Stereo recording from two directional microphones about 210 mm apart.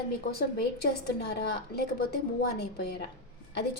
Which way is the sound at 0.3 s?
50° left (ahead or behind).